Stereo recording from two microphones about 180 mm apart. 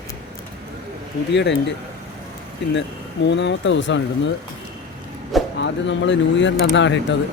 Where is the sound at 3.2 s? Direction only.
85° left.